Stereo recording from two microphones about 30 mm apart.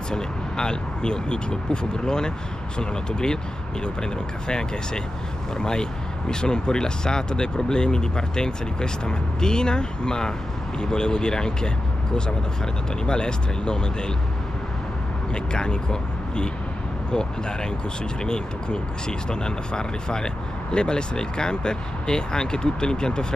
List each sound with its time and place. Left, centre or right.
0.1 s speech: left
13.0 s speech: left
15.3 s speech: left